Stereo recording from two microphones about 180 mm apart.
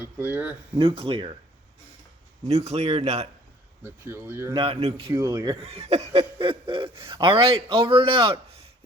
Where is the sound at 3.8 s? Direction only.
15° right (ahead or behind).